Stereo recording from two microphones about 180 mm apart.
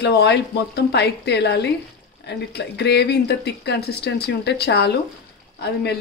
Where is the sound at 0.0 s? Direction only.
65° left (ahead or behind).